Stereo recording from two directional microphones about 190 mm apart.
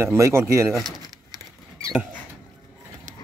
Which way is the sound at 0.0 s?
15° right (ahead or behind).